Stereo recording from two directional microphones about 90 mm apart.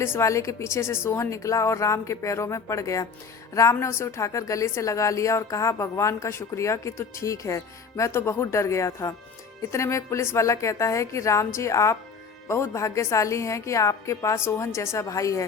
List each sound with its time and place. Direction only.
0.0 s a woman's voice: 30° left (ahead or behind)